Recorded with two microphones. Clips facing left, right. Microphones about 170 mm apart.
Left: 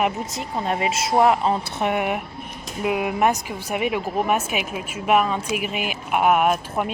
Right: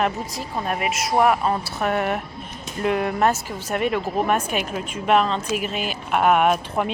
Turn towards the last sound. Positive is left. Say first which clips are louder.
# right 1 dB
turn(degrees=5)  # may be behind; listen again after turning